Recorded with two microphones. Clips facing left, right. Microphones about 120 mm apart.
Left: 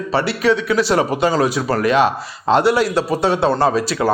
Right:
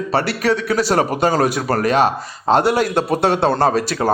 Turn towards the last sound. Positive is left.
turn(degrees=-50)  # may be behind; listen again after turning